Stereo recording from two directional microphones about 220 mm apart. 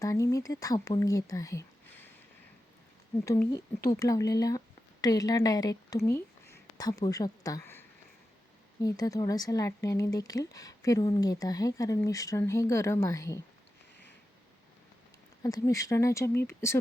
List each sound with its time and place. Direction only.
0.0 s speech: 15° left (ahead or behind)
3.2 s a woman's voice: 10° left (ahead or behind)
15.4 s speech: 15° left (ahead or behind)